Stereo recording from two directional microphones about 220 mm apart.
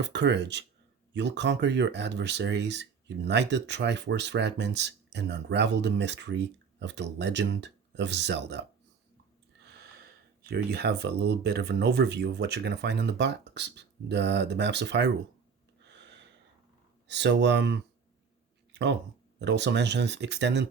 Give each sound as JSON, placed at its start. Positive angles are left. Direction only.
{"t": 0.0, "sound": "speech", "side_deg": -50}
{"t": 9.6, "sound": "speech", "side_deg": -45}
{"t": 15.8, "sound": "snort", "side_deg": -55}
{"t": 17.1, "sound": "speech", "side_deg": -50}
{"t": 18.7, "sound": "a sound", "side_deg": -55}
{"t": 19.4, "sound": "speech", "side_deg": -50}